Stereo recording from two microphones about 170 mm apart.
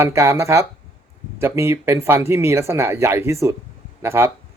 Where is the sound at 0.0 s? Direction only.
15° right (ahead or behind).